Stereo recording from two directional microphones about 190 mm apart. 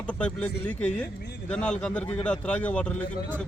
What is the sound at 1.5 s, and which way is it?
Speech, 5° left (ahead or behind).